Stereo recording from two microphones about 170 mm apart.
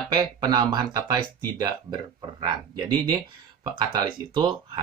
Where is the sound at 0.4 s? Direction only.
25° right (ahead or behind).